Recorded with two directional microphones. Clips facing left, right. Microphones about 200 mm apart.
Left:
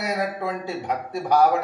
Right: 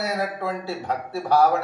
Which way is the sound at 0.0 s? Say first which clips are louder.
Even; 15° left (ahead or behind).